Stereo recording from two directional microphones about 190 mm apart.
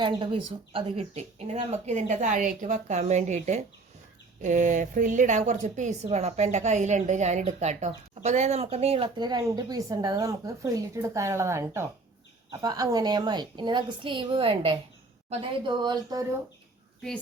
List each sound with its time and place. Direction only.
0.0 s a woman's voice: 25° right (ahead or behind)